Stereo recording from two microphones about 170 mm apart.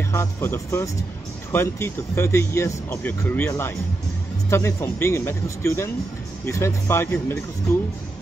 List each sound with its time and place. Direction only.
0.1 s speech: 15° left (ahead or behind)